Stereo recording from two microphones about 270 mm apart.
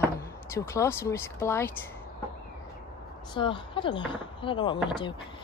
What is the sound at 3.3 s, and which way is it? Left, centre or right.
A woman's voice, centre.